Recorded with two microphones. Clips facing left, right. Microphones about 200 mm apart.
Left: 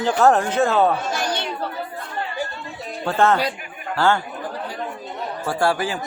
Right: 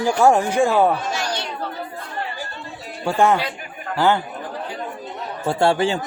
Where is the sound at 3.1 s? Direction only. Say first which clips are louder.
Right 1 dB; 15° right (ahead or behind).